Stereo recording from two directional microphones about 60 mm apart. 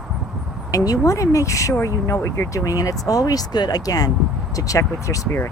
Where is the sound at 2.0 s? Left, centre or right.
Left.